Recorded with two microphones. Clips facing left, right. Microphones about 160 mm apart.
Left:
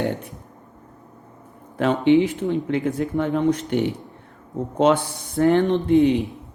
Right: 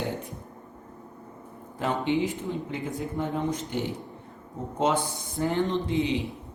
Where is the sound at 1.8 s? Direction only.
75° left (ahead or behind).